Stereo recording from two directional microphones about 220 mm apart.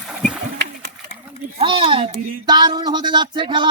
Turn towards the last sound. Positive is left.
turn(degrees=-20)  # may be behind; listen again after turning